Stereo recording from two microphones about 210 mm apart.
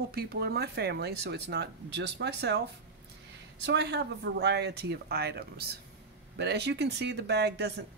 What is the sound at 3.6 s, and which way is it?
Speech, 55° right (ahead or behind).